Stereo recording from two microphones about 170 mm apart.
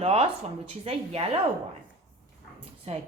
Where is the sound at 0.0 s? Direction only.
35° right (ahead or behind).